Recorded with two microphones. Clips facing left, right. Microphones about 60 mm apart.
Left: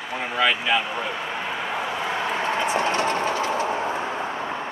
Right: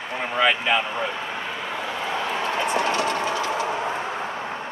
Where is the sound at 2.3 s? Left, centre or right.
Left.